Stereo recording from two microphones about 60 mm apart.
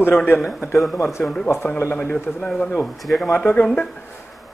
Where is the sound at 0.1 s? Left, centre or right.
Left.